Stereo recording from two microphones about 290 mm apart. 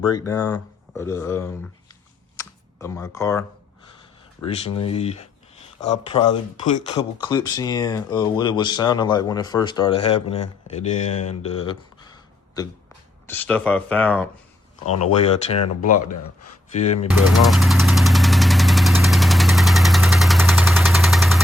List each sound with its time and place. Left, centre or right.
0.0 s speech: centre
2.3 s computer keyboard: centre
4.4 s speech: left; by 14.3 s centre
14.8 s speech: left
16.7 s speech: left
17.1 s engine knocking: centre